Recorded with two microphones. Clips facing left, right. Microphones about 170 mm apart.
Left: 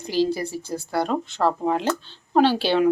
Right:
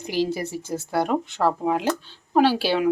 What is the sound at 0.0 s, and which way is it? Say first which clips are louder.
A woman's voice: left 2 dB; 15° right (ahead or behind).